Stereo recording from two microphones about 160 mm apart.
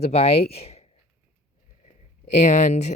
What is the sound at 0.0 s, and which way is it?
Speech, 40° left (ahead or behind).